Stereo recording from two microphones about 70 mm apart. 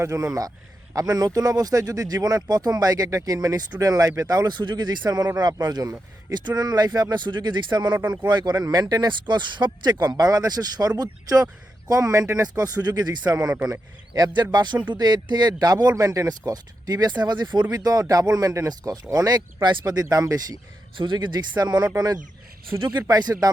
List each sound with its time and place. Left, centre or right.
0.0 s a man's voice: right
4.4 s speech: right
13.3 s speech: right
13.7 s speech: right
14.5 s speech: right
16.5 s a man's voice: right
18.7 s speech: right
21.6 s speech: right
21.9 s speech: right
22.7 s a man's voice: right
23.0 s speech: right